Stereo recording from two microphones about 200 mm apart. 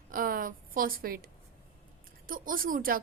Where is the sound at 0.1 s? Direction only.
45° right (ahead or behind).